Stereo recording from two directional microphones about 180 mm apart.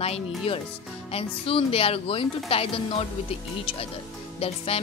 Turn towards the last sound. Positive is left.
turn(degrees=35)  # may be behind; listen again after turning